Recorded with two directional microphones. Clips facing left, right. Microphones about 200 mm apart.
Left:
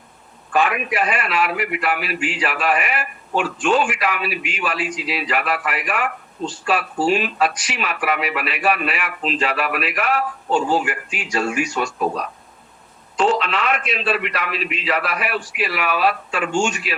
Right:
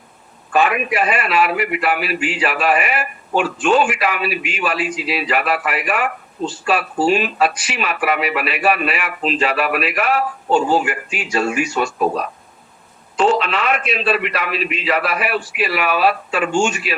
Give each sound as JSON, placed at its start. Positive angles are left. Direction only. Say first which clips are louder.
{"t": 0.5, "sound": "a man's voice", "louder": "right 3 dB", "side_deg": -5}
{"t": 10.5, "sound": "speech", "louder": "right 3 dB", "side_deg": -30}
{"t": 10.8, "sound": "a man's voice", "louder": "right 3 dB", "side_deg": -5}
{"t": 13.4, "sound": "a man's voice", "louder": "right 2 dB", "side_deg": -5}